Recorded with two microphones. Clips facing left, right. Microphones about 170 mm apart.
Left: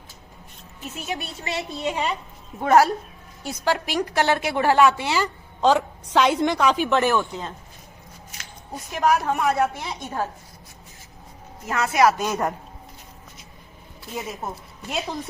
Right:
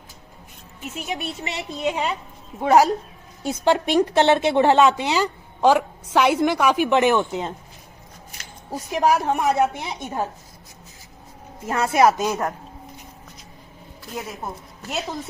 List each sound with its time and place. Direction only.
1.0 s a woman's voice: 20° right (ahead or behind)
3.4 s a woman's voice: 25° right (ahead or behind)
8.7 s a woman's voice: 30° right (ahead or behind)
11.7 s a woman's voice: 30° right (ahead or behind)
12.2 s a woman's voice: 10° right (ahead or behind)
14.1 s a woman's voice: 5° left (ahead or behind)